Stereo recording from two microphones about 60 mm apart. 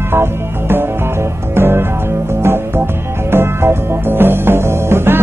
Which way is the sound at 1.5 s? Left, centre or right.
Right.